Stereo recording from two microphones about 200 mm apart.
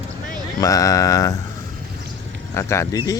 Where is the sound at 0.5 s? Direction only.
15° left (ahead or behind).